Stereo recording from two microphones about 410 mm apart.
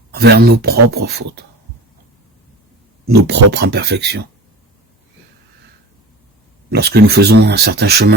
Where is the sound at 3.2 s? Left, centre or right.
Right.